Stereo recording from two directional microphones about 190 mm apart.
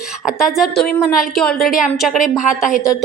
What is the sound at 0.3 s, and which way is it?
A woman's voice, centre (ahead or behind).